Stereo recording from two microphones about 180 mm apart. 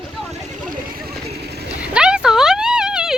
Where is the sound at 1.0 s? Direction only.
60° right (ahead or behind).